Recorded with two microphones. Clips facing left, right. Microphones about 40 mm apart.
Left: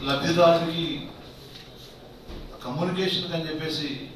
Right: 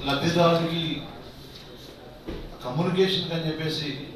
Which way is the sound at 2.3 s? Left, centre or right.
Right.